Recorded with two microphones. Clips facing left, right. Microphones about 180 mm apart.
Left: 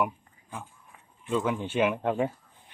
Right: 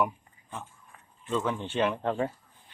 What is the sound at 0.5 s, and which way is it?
Speech, 10° left (ahead or behind).